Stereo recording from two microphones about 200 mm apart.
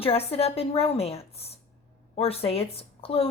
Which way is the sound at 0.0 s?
30° left (ahead or behind).